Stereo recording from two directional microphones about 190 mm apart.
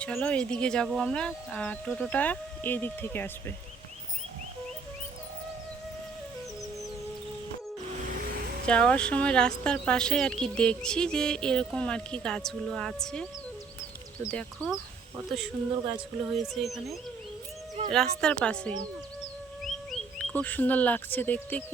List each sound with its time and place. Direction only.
0.0 s speech: 5° left (ahead or behind)
8.2 s a sound: 55° right (ahead or behind)
8.6 s speech: 5° left (ahead or behind)
14.3 s speech: 5° left (ahead or behind)
16.3 s speech: centre (ahead or behind)